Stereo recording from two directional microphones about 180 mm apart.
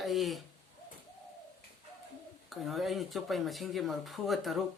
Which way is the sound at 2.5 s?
Centre (ahead or behind).